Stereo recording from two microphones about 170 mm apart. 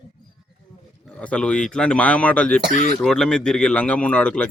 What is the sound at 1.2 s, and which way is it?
Speech, 5° left (ahead or behind).